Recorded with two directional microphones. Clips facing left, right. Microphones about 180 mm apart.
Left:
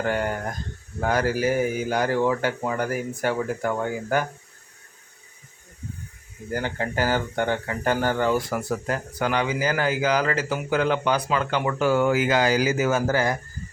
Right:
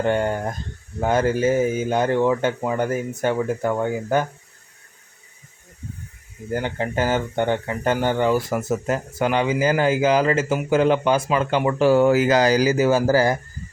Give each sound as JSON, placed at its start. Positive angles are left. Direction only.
{"t": 0.0, "sound": "speech", "side_deg": -25}
{"t": 6.5, "sound": "speech", "side_deg": -20}